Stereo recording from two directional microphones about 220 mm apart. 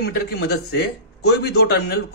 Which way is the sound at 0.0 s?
45° left (ahead or behind).